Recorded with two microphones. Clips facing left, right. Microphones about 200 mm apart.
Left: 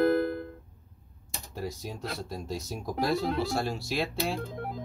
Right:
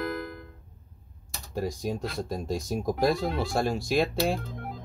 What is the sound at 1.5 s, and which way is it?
Speech, 45° right (ahead or behind).